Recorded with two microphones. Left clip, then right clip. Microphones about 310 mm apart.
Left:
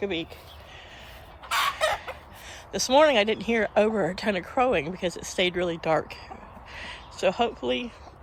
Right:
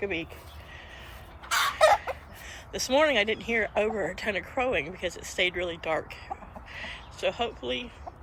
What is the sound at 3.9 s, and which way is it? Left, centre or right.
Speech, left.